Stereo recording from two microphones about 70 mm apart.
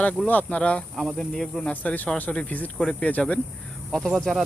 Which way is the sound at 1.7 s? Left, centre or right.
Left.